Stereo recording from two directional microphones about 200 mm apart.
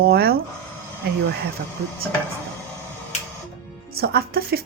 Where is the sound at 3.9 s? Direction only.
50° right (ahead or behind).